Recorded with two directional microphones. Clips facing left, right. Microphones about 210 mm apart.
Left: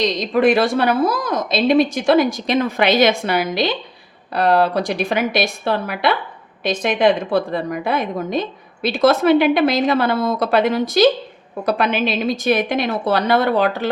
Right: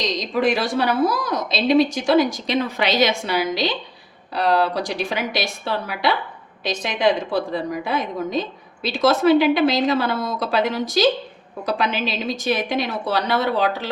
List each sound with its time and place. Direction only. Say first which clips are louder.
0.2 s a woman's voice: left 5 dB; 55° left (ahead or behind)